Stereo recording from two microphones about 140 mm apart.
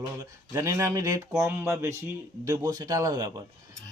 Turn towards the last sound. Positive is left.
turn(degrees=-30)  # may be behind; listen again after turning